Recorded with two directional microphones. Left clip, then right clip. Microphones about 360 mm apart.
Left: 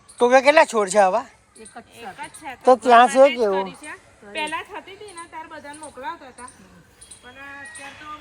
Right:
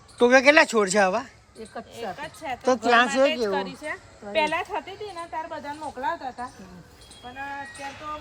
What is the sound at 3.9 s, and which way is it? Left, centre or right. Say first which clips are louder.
A woman's voice: right 5 dB; right.